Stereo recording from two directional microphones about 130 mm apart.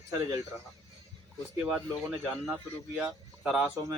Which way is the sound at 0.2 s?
25° right (ahead or behind).